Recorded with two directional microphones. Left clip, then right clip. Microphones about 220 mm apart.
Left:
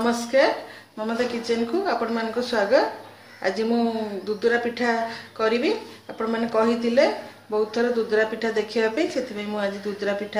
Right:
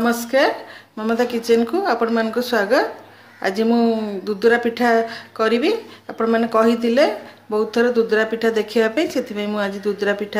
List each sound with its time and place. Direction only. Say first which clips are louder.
0.0 s speech: right 3 dB; 45° right (ahead or behind)